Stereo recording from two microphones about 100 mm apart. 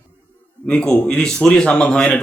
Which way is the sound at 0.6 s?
10° left (ahead or behind).